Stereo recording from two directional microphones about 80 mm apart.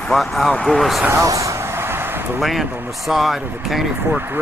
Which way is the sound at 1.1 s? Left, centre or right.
Right.